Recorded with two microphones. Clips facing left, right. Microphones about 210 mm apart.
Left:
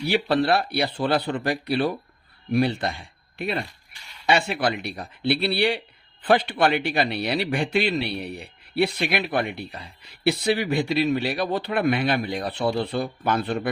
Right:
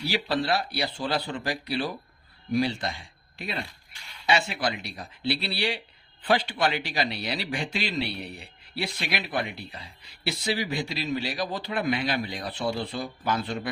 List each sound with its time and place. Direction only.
0.0 s speech: 60° left (ahead or behind)